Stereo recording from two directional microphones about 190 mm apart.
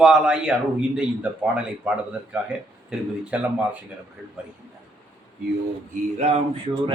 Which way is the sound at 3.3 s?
5° right (ahead or behind).